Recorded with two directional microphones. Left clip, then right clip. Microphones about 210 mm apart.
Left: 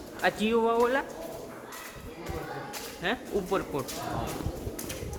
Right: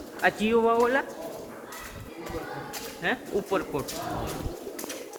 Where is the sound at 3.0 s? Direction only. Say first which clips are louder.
Right 2 dB; 20° left (ahead or behind).